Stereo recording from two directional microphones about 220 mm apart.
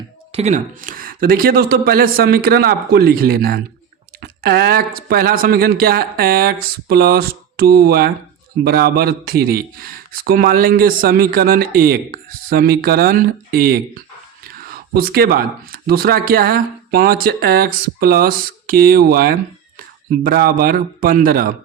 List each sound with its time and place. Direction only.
0.3 s a man's voice: 30° right (ahead or behind)